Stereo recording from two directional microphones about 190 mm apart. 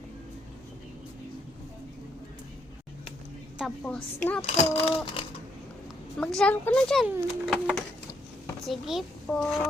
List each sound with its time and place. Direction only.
3.6 s a woman's voice: 5° left (ahead or behind)
4.4 s speech: 35° left (ahead or behind)
6.1 s a woman's voice: 5° left (ahead or behind)